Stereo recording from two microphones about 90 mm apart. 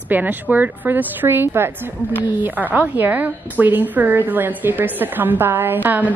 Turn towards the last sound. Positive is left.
turn(degrees=-20)  # may be behind; listen again after turning